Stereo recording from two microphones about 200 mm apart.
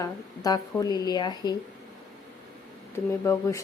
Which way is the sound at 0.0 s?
20° left (ahead or behind).